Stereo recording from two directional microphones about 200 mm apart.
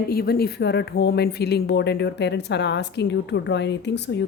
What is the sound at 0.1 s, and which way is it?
A woman's voice, 50° left (ahead or behind).